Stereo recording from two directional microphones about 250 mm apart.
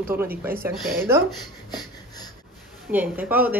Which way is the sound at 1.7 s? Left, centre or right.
Centre.